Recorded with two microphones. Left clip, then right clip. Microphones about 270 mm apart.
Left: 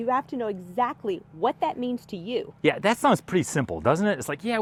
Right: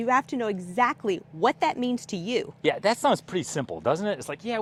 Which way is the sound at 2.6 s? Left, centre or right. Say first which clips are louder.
Left 2 dB; left.